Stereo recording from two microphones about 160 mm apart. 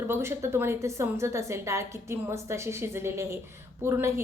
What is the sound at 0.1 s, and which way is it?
A woman's voice, 15° right (ahead or behind).